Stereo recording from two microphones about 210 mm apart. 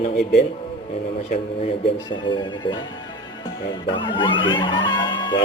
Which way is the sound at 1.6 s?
25° left (ahead or behind).